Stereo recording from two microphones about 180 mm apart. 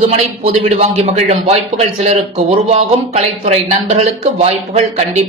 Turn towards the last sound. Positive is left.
turn(degrees=-35)  # may be behind; listen again after turning